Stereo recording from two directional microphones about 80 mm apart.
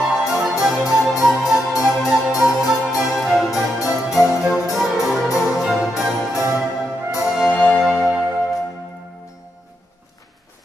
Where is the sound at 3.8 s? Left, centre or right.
Left.